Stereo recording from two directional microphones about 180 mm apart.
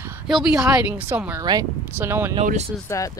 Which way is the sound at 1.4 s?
20° right (ahead or behind).